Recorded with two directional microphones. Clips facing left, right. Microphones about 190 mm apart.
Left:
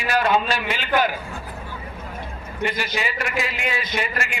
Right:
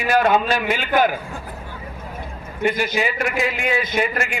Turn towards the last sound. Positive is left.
turn(degrees=-50)  # may be behind; listen again after turning